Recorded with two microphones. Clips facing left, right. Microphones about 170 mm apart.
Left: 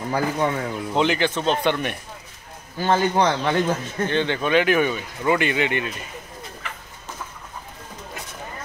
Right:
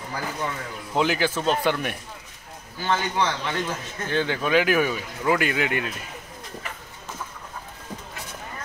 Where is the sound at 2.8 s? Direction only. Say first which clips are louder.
Left 5 dB; 45° left (ahead or behind).